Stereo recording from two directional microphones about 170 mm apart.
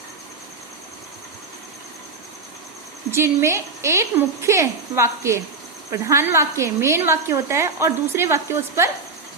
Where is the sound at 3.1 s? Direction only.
15° right (ahead or behind).